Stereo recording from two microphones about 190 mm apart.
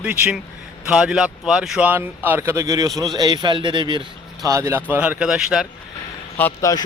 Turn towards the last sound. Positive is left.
turn(degrees=15)  # may be behind; listen again after turning